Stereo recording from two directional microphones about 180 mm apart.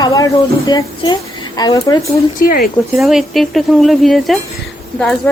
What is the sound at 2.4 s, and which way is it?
Speech, 55° left (ahead or behind).